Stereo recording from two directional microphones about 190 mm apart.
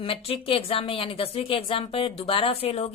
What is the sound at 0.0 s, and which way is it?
A woman's voice, 30° left (ahead or behind).